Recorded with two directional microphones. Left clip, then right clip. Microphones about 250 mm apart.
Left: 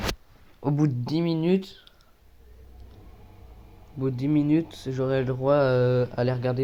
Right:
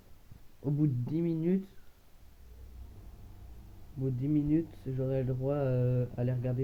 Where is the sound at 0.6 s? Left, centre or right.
Centre.